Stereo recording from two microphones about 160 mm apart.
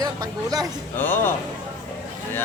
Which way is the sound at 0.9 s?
10° left (ahead or behind).